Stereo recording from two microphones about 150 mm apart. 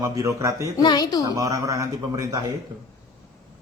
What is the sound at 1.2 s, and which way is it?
A man's voice, 25° right (ahead or behind).